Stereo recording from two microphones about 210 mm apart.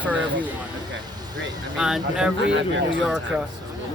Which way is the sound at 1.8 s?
5° right (ahead or behind).